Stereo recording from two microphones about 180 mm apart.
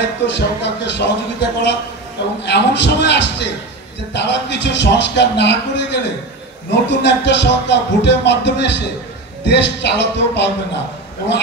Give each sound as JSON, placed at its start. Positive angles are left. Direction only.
{"t": 0.3, "sound": "speech", "side_deg": 75}